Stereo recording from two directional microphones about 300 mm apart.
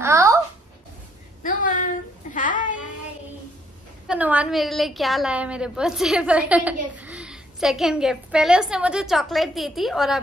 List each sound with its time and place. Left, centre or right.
0.0 s babbling: centre
1.4 s a sound: left
4.1 s a woman's voice: centre